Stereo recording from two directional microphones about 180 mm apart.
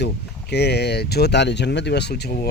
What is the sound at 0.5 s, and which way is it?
Speech, 70° left (ahead or behind).